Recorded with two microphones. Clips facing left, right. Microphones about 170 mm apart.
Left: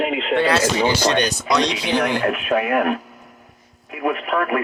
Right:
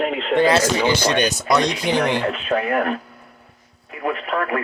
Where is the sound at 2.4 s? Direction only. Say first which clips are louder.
Left 2 dB; 10° left (ahead or behind).